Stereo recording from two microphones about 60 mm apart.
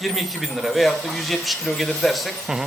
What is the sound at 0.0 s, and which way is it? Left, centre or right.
Speech, centre.